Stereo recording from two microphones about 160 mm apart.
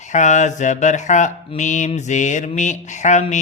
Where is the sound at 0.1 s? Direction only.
50° left (ahead or behind).